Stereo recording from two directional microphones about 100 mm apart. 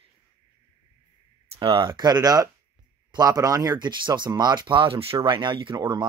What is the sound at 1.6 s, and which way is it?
Speech, 55° right (ahead or behind).